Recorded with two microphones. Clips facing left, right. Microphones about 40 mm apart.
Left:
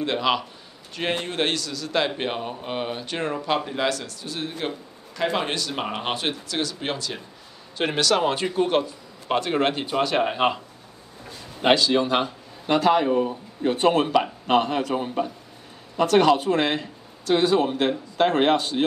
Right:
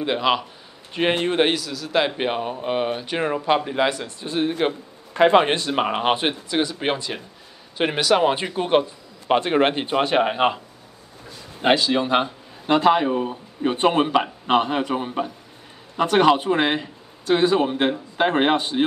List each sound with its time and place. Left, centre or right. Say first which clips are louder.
0.0 s speech: right 2 dB; centre
0.9 s speech: right 6 dB; right
1.4 s speech: right 5 dB; centre; by 7.2 s right
7.7 s speech: right 3 dB; centre
11.7 s a man's voice: right 1 dB; right